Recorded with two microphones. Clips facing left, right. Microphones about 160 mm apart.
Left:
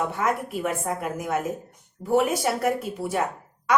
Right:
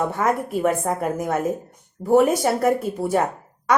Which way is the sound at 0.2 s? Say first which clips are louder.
Right 5 dB; 40° right (ahead or behind).